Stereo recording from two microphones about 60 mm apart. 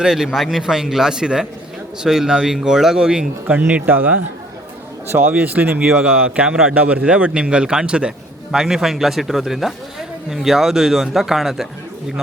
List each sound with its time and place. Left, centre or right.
0.0 s a man's voice: centre
0.6 s a man's voice: centre
3.7 s speech: right
5.3 s a man's voice: right
8.5 s a man's voice: centre